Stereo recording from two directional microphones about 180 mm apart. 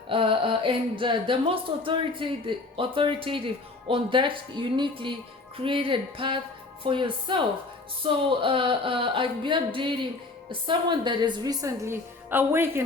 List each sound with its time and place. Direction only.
0.1 s speech: 30° right (ahead or behind); by 12.8 s 10° right (ahead or behind)